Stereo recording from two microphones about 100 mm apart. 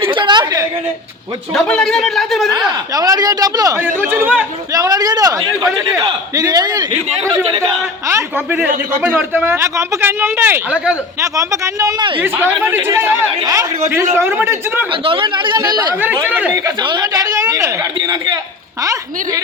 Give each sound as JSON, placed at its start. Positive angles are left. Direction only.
{"t": 0.0, "sound": "a sound", "side_deg": -55}
{"t": 1.5, "sound": "speech", "side_deg": 5}
{"t": 2.9, "sound": "a woman's voice", "side_deg": -40}
{"t": 3.8, "sound": "a man's voice", "side_deg": -20}
{"t": 4.7, "sound": "a woman's voice", "side_deg": -35}
{"t": 8.4, "sound": "a man's voice", "side_deg": -20}
{"t": 9.6, "sound": "a man's voice", "side_deg": -30}
{"t": 11.9, "sound": "a man's voice", "side_deg": -55}
{"t": 12.2, "sound": "a man's voice", "side_deg": -20}
{"t": 13.4, "sound": "a woman's voice", "side_deg": -35}
{"t": 15.0, "sound": "a man's voice", "side_deg": -60}